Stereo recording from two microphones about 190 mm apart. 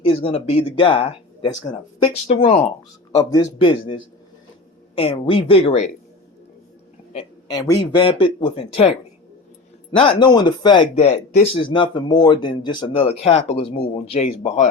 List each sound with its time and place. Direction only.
0.0 s speech: 30° left (ahead or behind)
3.2 s speech: 20° left (ahead or behind)
7.1 s speech: 25° left (ahead or behind)
10.0 s speech: 25° left (ahead or behind)
10.9 s speech: 35° left (ahead or behind)